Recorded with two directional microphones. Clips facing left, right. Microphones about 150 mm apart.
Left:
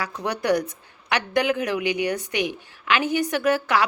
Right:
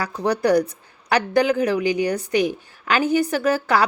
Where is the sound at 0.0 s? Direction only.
35° right (ahead or behind).